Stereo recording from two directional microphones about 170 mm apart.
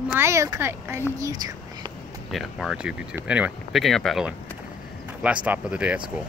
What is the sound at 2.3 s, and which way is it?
Speech, centre (ahead or behind).